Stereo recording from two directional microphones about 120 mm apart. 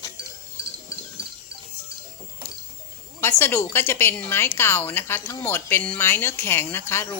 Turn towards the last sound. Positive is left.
turn(degrees=20)  # may be behind; listen again after turning